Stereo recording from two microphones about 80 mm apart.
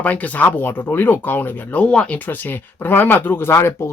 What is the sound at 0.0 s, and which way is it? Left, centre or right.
Speech, centre.